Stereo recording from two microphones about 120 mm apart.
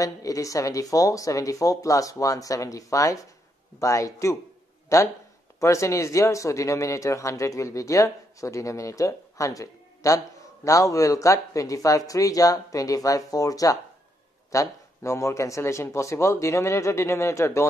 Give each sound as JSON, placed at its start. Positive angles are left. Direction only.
{"t": 0.0, "sound": "speech", "side_deg": 30}